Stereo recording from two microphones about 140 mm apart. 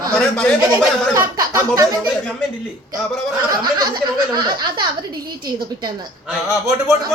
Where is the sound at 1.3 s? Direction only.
25° right (ahead or behind).